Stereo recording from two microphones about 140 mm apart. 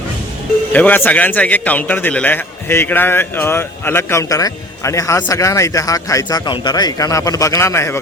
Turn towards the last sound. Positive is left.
turn(degrees=20)  # may be behind; listen again after turning